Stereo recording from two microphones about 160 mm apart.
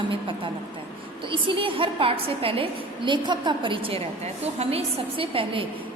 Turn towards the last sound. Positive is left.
turn(degrees=-35)  # may be behind; listen again after turning